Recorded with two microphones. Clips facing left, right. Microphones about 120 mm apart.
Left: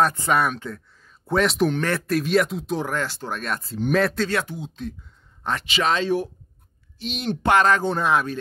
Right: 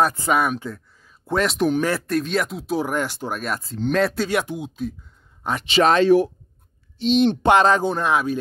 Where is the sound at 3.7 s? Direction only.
10° left (ahead or behind).